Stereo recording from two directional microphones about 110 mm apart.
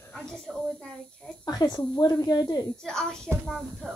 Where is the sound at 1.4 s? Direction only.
40° left (ahead or behind).